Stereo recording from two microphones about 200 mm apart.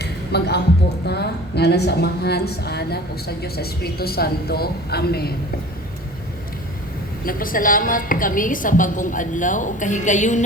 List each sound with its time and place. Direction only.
0.0 s a sound: 55° left (ahead or behind)
1.0 s a woman's voice: 55° left (ahead or behind)
7.3 s a woman's voice: 45° left (ahead or behind)